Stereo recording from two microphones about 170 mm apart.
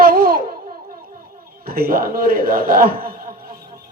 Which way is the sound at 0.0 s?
55° right (ahead or behind).